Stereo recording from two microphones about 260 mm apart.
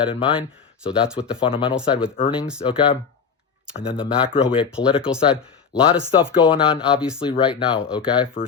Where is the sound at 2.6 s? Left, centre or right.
Centre.